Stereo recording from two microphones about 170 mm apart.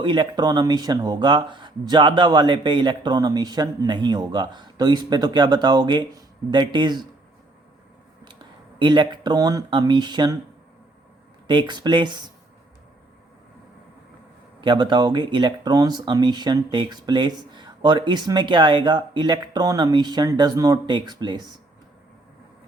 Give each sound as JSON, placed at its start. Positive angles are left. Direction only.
{"t": 0.0, "sound": "speech", "side_deg": -30}
{"t": 8.8, "sound": "speech", "side_deg": -25}
{"t": 11.4, "sound": "speech", "side_deg": -25}
{"t": 14.6, "sound": "speech", "side_deg": -25}